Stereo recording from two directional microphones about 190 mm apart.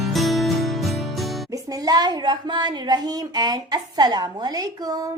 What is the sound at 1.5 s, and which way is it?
A child's voice, 20° right (ahead or behind).